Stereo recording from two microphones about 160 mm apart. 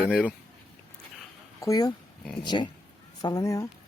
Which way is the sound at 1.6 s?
25° left (ahead or behind).